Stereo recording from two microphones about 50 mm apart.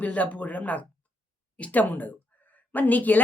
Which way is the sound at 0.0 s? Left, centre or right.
Left.